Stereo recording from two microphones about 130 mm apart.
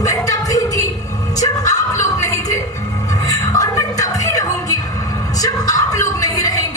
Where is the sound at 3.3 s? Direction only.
25° left (ahead or behind).